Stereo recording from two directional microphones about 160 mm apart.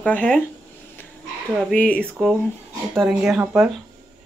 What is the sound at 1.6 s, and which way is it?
Speech, 5° left (ahead or behind).